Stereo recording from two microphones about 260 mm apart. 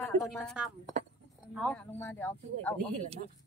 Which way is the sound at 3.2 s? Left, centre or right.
Right.